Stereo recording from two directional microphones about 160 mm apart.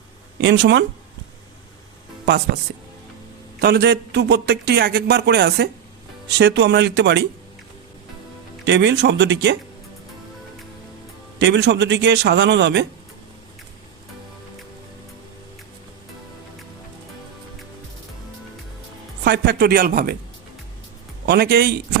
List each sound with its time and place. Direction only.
0.4 s speech: 90° right
3.6 s speech: 90° right
8.6 s speech: 90° right
11.3 s speech: 90° right
19.2 s a man's voice: 90° right; by 20.1 s 65° right (ahead or behind)
21.2 s a man's voice: 85° right